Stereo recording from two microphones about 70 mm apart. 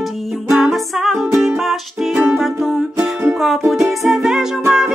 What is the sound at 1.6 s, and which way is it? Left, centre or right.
Music, centre.